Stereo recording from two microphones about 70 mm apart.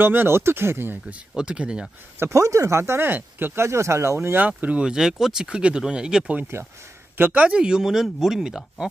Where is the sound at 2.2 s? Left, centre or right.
Right.